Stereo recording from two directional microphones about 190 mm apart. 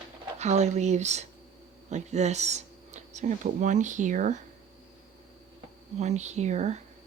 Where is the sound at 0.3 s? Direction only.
35° right (ahead or behind).